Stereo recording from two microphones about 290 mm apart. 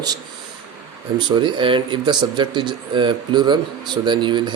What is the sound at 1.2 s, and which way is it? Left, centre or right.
Speech, centre.